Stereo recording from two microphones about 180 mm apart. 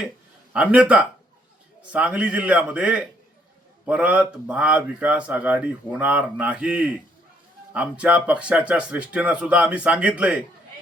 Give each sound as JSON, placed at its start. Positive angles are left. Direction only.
{"t": 0.5, "sound": "speech", "side_deg": -5}